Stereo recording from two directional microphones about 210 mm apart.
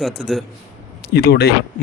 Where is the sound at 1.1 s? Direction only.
50° left (ahead or behind).